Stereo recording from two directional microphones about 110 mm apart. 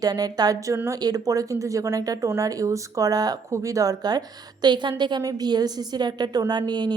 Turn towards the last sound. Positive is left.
turn(degrees=-40)  # may be behind; listen again after turning